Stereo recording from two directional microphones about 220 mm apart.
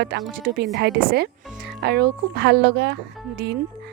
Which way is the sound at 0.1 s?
50° right (ahead or behind).